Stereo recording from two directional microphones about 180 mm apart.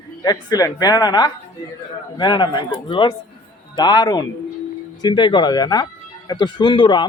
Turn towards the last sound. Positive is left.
turn(degrees=25)  # may be behind; listen again after turning